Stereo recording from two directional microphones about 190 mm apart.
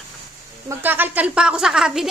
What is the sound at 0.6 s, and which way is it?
A woman's voice, 10° right (ahead or behind).